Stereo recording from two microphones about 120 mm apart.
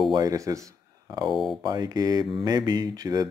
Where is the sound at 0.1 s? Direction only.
30° right (ahead or behind).